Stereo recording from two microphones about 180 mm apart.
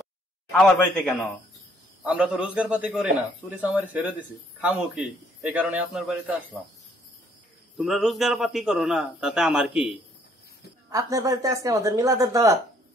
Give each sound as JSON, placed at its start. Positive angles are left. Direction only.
{"t": 0.5, "sound": "a man's voice", "side_deg": 10}
{"t": 7.7, "sound": "a man's voice", "side_deg": 0}
{"t": 10.9, "sound": "speech", "side_deg": -20}